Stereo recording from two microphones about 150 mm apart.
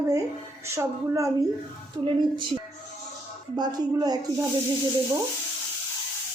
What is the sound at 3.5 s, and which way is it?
Speech, 25° right (ahead or behind).